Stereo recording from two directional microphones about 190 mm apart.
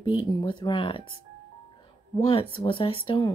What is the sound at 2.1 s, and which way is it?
Speech, 25° left (ahead or behind).